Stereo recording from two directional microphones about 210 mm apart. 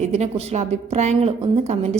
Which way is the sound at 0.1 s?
30° right (ahead or behind).